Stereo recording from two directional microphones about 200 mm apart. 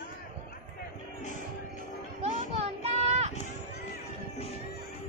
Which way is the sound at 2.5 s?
30° right (ahead or behind).